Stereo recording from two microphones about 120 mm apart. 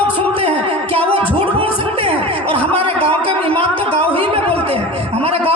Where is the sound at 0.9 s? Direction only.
50° right (ahead or behind).